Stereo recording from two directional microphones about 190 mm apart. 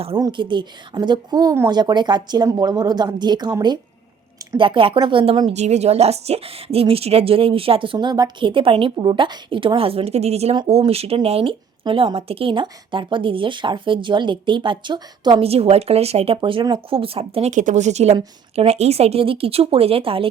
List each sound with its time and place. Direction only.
0.2 s a woman's voice: 25° right (ahead or behind)